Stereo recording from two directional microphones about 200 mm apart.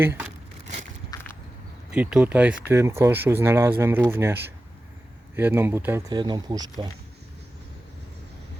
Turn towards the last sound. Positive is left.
turn(degrees=-20)  # may be behind; listen again after turning